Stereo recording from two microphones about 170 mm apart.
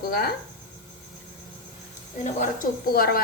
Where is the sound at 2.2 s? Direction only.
50° left (ahead or behind).